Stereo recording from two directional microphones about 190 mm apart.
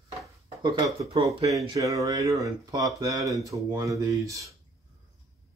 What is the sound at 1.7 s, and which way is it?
Speech, 15° right (ahead or behind).